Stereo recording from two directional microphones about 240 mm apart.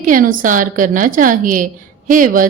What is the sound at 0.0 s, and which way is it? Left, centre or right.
A woman's voice, right.